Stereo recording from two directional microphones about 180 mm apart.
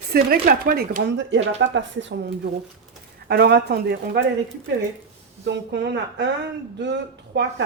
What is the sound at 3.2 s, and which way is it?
Speech, 65° right (ahead or behind).